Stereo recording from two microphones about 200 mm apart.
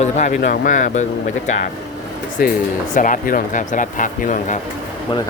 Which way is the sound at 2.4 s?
45° left (ahead or behind).